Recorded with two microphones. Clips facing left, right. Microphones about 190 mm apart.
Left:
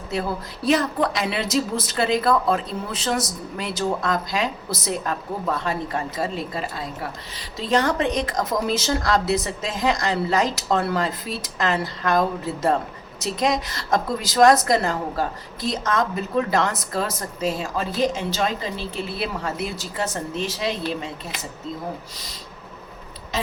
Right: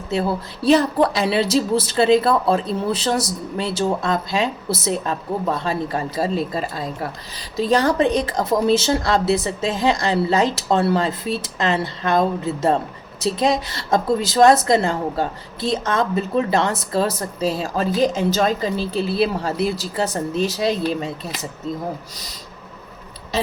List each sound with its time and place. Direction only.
0.1 s a woman's voice: 30° right (ahead or behind)